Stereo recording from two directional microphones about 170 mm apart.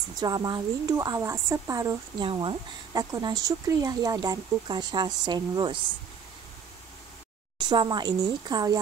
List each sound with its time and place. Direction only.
0.2 s speech: 25° right (ahead or behind)
7.5 s speech: 25° right (ahead or behind)